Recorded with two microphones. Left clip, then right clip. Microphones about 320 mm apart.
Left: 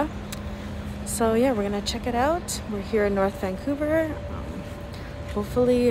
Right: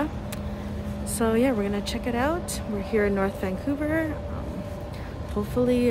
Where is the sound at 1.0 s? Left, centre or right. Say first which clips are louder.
Left 2 dB; centre.